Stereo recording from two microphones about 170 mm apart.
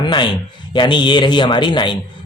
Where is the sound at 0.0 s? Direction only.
25° left (ahead or behind).